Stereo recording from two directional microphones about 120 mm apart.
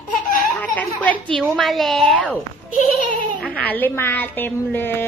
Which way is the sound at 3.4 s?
10° left (ahead or behind).